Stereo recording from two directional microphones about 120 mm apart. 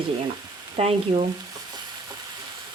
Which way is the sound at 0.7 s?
55° right (ahead or behind).